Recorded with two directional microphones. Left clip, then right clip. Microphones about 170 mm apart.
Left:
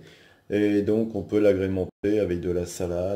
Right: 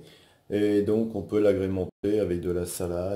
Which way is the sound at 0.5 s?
20° left (ahead or behind).